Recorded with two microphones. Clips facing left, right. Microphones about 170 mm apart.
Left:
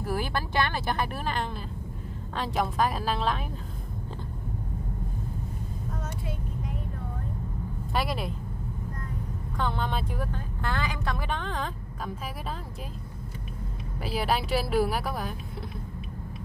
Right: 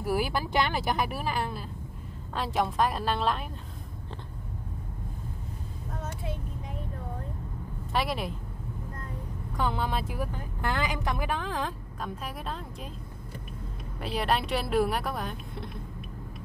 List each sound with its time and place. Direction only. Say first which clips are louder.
0.0 s speech: right 2 dB; 10° right (ahead or behind)
7.9 s speech: even; centre (ahead or behind)
9.6 s speech: right 1 dB; 5° right (ahead or behind)
14.0 s speech: even; centre (ahead or behind)